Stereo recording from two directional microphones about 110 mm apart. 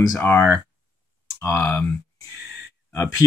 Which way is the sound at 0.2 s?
20° left (ahead or behind).